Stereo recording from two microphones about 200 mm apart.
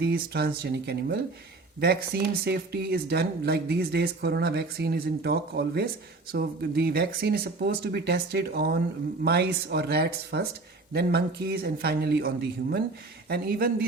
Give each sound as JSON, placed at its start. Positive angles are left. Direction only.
{"t": 0.0, "sound": "speech", "side_deg": -50}